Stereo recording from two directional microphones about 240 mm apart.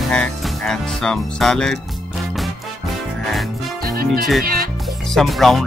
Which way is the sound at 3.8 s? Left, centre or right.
Right.